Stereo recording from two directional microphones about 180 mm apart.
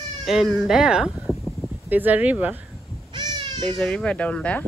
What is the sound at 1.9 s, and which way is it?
Speech, 10° right (ahead or behind).